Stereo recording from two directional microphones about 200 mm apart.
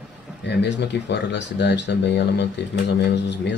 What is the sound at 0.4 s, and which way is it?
Speech, 60° left (ahead or behind).